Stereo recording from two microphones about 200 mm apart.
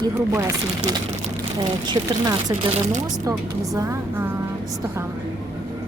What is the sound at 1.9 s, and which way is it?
Speech, 20° right (ahead or behind).